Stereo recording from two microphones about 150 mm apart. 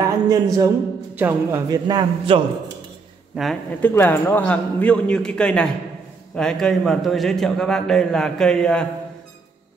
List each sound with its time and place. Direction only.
0.0 s a man's voice: 25° right (ahead or behind)
1.1 s speech: 10° right (ahead or behind)
1.7 s a man's voice: 30° right (ahead or behind)
3.3 s speech: 5° right (ahead or behind)
3.8 s a man's voice: 15° left (ahead or behind)